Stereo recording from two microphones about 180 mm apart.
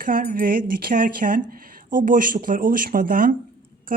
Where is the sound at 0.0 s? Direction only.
50° right (ahead or behind).